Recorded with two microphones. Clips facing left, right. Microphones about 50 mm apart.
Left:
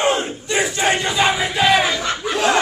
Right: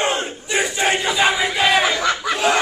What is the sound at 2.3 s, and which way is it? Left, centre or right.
Snicker, centre.